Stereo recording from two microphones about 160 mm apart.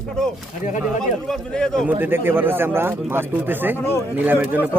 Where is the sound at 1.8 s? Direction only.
15° right (ahead or behind).